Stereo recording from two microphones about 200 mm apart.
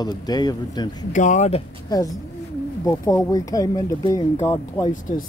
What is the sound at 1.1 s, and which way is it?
Speech, 40° left (ahead or behind).